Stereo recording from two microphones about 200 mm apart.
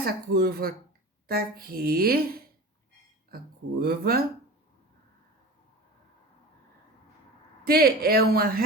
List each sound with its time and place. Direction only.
0.0 s a woman's voice: 50° right (ahead or behind)
7.6 s a woman's voice: 50° right (ahead or behind)